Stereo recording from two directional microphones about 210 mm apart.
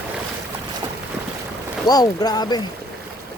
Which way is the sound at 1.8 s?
20° left (ahead or behind).